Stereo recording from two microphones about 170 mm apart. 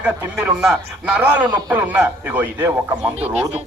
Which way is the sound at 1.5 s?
20° right (ahead or behind).